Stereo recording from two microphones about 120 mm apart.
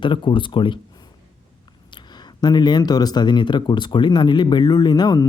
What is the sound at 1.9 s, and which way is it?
Speech, 40° left (ahead or behind).